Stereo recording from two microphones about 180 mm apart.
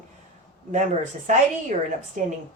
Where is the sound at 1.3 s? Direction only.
45° right (ahead or behind).